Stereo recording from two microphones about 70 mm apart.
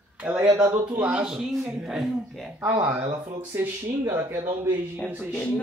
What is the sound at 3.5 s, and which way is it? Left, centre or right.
A man's voice, right.